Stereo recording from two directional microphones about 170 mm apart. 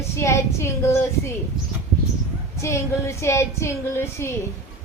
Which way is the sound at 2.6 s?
15° left (ahead or behind).